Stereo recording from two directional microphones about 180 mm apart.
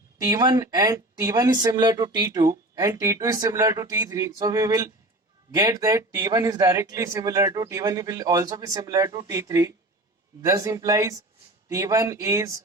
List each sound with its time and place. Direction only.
0.2 s speech: 20° right (ahead or behind)